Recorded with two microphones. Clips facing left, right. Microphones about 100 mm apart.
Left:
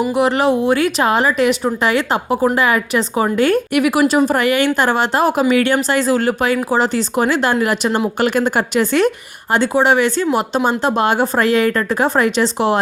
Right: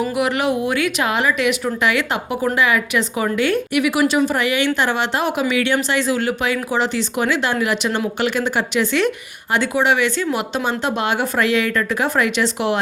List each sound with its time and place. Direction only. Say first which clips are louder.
0.1 s a woman's voice: left 4 dB; 30° left (ahead or behind)